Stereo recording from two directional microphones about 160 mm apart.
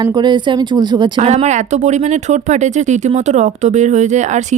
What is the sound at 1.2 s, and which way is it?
Speech, 45° right (ahead or behind).